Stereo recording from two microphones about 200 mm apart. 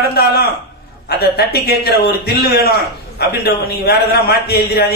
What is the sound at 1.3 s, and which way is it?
A man's voice, 50° left (ahead or behind).